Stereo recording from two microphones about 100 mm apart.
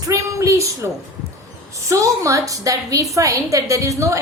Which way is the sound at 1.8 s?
30° right (ahead or behind).